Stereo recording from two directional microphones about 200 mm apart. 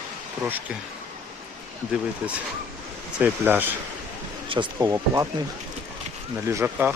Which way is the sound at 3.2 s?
10° right (ahead or behind).